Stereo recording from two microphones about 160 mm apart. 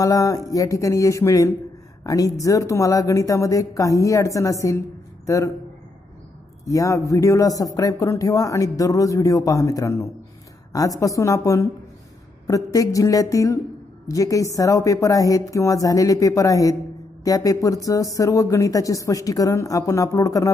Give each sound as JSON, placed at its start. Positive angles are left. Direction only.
{"t": 0.0, "sound": "speech", "side_deg": 20}
{"t": 6.6, "sound": "speech", "side_deg": 20}